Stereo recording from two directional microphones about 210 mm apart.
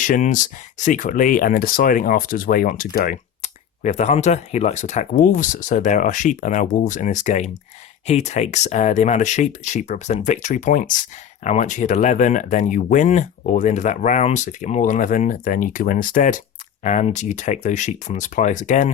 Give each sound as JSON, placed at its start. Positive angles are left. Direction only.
{"t": 0.0, "sound": "speech", "side_deg": 40}